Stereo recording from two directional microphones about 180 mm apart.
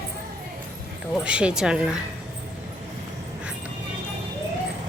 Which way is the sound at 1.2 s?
5° right (ahead or behind).